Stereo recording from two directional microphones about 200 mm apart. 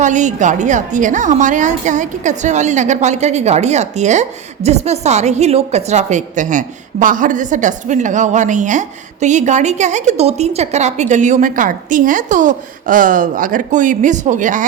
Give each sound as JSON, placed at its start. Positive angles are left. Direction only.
{"t": 0.0, "sound": "a woman's voice", "side_deg": -35}